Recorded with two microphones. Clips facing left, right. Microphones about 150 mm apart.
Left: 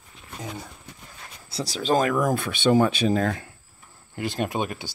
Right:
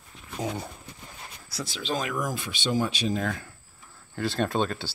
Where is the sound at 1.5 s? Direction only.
35° left (ahead or behind); by 3.3 s 55° left (ahead or behind).